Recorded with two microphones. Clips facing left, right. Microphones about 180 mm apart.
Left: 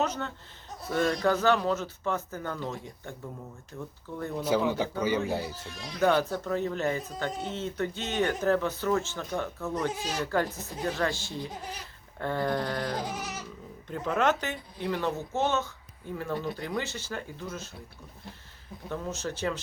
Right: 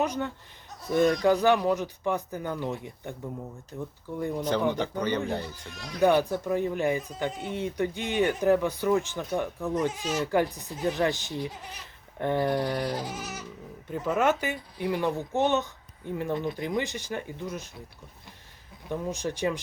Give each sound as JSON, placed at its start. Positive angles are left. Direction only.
{"t": 0.0, "sound": "a man's voice", "side_deg": -15}
{"t": 4.4, "sound": "speech", "side_deg": 5}
{"t": 6.0, "sound": "speech", "side_deg": -15}
{"t": 18.9, "sound": "speech", "side_deg": -15}